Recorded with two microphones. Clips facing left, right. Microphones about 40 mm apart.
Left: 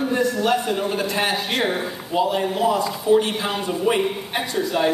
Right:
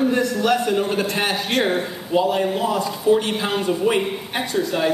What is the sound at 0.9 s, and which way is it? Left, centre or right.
Speech, right.